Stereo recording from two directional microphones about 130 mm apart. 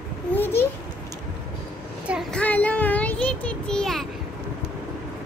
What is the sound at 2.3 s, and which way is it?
Child singing, 10° left (ahead or behind).